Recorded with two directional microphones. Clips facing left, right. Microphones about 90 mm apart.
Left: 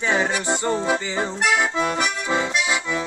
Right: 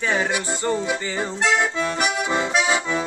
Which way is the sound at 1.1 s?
10° left (ahead or behind).